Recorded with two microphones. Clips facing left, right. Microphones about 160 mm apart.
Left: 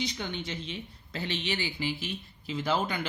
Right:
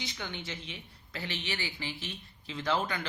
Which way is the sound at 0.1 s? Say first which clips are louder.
Left 4 dB; 20° left (ahead or behind).